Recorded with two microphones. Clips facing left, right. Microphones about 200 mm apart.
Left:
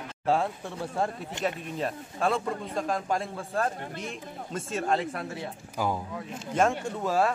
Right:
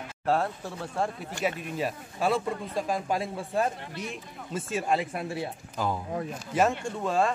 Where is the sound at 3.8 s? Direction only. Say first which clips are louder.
Left 1 dB; 50° left (ahead or behind).